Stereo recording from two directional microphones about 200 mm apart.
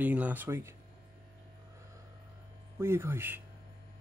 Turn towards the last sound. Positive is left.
turn(degrees=-10)  # may be behind; listen again after turning